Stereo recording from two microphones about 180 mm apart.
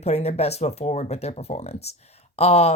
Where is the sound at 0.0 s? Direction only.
35° left (ahead or behind).